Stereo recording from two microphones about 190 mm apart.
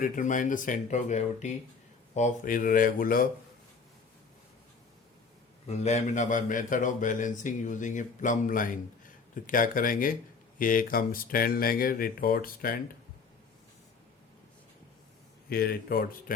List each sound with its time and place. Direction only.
0.0 s speech: 45° left (ahead or behind)
5.6 s speech: 35° left (ahead or behind)
15.4 s speech: 50° left (ahead or behind)